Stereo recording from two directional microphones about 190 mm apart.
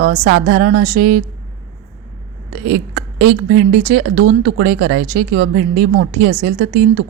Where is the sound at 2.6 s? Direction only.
50° right (ahead or behind).